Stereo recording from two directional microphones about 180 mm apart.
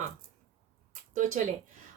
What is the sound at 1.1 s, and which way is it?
Speech, 45° right (ahead or behind).